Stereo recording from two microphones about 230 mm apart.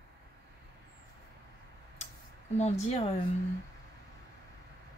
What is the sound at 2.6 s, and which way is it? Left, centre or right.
Speech, left.